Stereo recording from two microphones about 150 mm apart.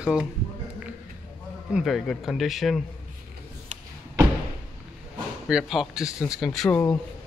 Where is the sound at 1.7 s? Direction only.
Centre (ahead or behind).